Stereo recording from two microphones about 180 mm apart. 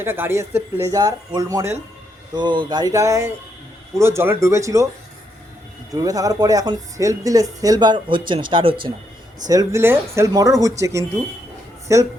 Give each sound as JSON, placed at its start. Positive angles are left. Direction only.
{"t": 0.0, "sound": "speech", "side_deg": -15}
{"t": 5.9, "sound": "speech", "side_deg": -20}
{"t": 9.5, "sound": "speech", "side_deg": -15}